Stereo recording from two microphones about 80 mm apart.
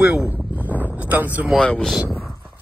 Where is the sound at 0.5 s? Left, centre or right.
Right.